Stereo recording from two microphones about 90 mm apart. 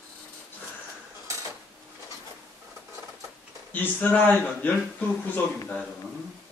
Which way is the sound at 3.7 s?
20° left (ahead or behind).